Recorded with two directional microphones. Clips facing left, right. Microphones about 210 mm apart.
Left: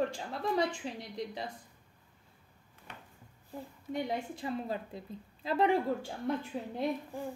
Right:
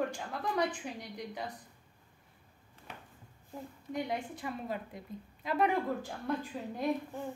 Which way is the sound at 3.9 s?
25° left (ahead or behind).